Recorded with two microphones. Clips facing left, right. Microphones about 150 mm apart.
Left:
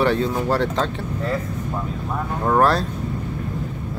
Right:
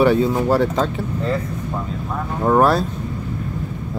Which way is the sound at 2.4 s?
5° right (ahead or behind).